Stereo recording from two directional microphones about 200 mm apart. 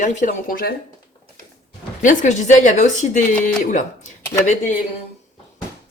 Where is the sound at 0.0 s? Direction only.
40° left (ahead or behind).